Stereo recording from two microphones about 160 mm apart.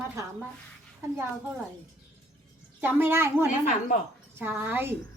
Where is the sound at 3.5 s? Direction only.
50° left (ahead or behind).